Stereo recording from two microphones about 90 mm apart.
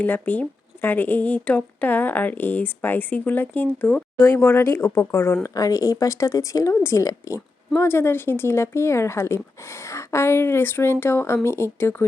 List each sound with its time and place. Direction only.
0.0 s speech: 20° left (ahead or behind); by 7.3 s 40° left (ahead or behind)
7.8 s speech: 25° left (ahead or behind)